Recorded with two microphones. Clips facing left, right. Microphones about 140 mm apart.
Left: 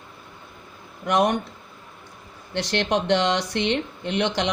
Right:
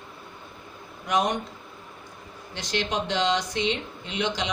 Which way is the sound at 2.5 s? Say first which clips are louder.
Left 6 dB; 65° left (ahead or behind).